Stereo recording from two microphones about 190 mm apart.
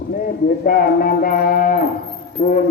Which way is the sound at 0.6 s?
50° left (ahead or behind).